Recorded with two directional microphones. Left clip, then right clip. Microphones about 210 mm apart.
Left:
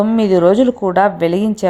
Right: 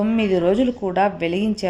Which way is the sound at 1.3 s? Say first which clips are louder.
Left 6 dB; 15° left (ahead or behind).